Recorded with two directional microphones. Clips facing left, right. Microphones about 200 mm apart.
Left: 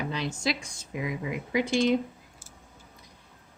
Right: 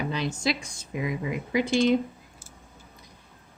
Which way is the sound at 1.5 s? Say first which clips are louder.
Right 2 dB; 15° left (ahead or behind).